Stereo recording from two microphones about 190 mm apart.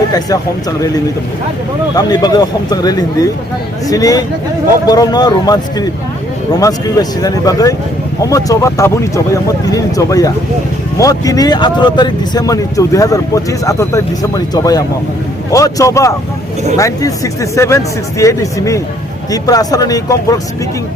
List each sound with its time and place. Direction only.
2.0 s speech: 20° left (ahead or behind)